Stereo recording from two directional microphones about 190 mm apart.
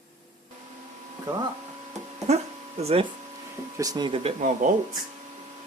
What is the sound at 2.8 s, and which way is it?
Speech, 30° right (ahead or behind).